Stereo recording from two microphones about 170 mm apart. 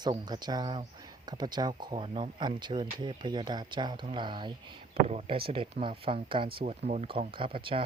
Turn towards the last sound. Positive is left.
turn(degrees=-30)  # may be behind; listen again after turning